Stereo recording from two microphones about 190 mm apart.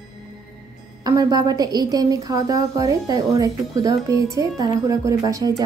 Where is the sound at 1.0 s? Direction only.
20° right (ahead or behind).